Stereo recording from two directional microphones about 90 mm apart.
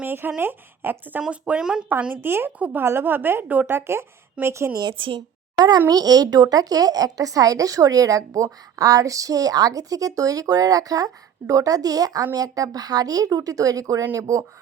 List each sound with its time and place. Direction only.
0.0 s a woman's voice: 20° right (ahead or behind)
1.2 s a woman's voice: 10° right (ahead or behind); by 4.8 s 30° right (ahead or behind)
4.8 s a woman's voice: 65° right (ahead or behind)
5.5 s a child's voice: 50° right (ahead or behind)